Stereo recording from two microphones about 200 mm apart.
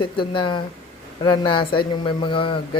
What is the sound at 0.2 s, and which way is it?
A man's voice, 25° left (ahead or behind).